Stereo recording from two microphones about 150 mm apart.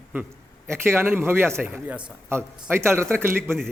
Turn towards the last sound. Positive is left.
turn(degrees=-15)  # may be behind; listen again after turning